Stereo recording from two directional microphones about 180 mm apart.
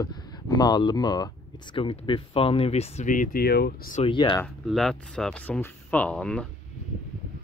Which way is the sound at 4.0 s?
25° left (ahead or behind).